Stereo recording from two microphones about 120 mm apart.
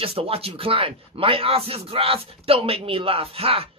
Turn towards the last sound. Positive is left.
turn(degrees=-50)  # may be behind; listen again after turning